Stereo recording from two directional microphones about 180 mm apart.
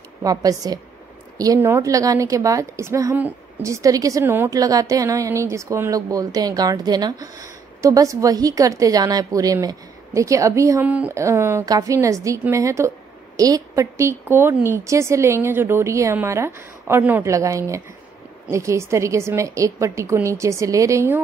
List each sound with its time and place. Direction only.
0.2 s a woman's voice: 20° right (ahead or behind)